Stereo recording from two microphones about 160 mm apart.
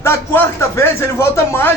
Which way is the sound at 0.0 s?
15° left (ahead or behind).